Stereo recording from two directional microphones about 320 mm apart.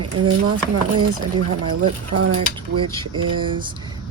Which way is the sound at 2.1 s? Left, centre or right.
Right.